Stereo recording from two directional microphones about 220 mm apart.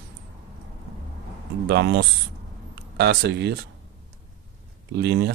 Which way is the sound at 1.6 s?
50° right (ahead or behind).